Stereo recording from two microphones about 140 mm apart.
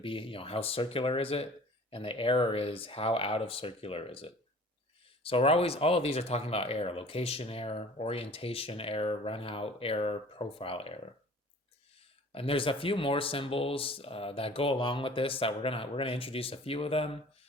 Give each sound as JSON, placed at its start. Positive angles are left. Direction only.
{"t": 0.0, "sound": "speech", "side_deg": 40}
{"t": 12.3, "sound": "speech", "side_deg": 40}